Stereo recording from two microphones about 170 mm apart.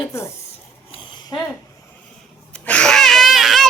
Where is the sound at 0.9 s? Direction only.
30° left (ahead or behind).